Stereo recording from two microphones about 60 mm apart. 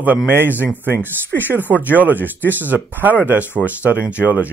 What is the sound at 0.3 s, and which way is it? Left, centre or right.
Speech, right.